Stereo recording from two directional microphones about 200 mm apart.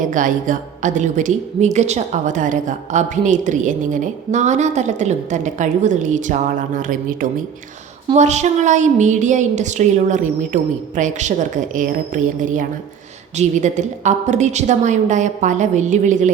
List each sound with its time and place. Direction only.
0.0 s a woman's voice: 40° right (ahead or behind)